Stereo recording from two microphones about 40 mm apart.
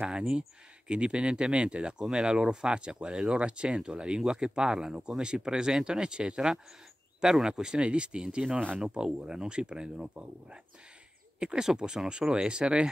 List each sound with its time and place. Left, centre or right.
0.0 s speech: right